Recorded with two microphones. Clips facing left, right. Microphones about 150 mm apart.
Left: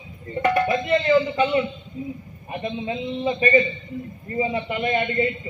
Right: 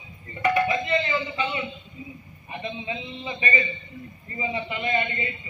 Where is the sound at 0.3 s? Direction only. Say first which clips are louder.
Left 3 dB; 45° left (ahead or behind).